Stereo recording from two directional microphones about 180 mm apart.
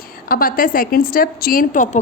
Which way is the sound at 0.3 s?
50° left (ahead or behind).